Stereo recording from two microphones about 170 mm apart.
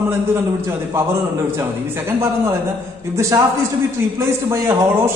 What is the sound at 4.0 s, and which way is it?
A man's voice, 15° right (ahead or behind).